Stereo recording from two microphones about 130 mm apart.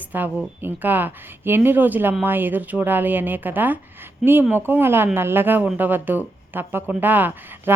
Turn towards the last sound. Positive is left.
turn(degrees=-15)  # may be behind; listen again after turning